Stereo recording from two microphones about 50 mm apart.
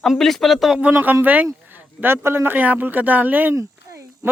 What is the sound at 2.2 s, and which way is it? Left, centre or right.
Speech, right.